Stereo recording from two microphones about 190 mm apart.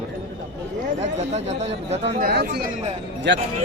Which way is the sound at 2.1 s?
50° right (ahead or behind).